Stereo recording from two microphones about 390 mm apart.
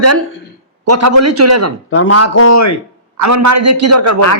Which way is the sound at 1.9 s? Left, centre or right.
Left.